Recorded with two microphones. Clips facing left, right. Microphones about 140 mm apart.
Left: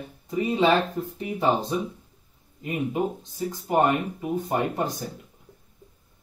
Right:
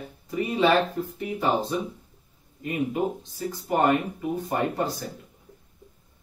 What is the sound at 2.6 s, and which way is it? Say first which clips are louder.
Speech: even; 20° left (ahead or behind).